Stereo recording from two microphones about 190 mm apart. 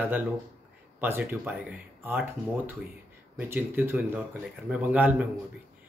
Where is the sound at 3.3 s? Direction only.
10° right (ahead or behind).